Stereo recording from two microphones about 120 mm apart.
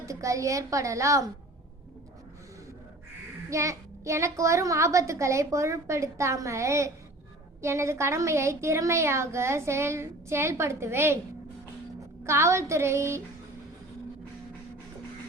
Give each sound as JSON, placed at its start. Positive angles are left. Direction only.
{"t": 0.0, "sound": "a woman's voice", "side_deg": -25}
{"t": 3.5, "sound": "a woman's voice", "side_deg": -25}
{"t": 12.2, "sound": "a woman's voice", "side_deg": -25}